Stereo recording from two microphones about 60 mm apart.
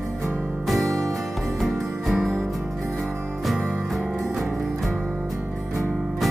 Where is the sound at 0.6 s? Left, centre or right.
Centre.